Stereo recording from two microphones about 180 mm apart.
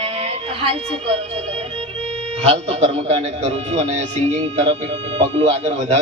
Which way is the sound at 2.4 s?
35° right (ahead or behind).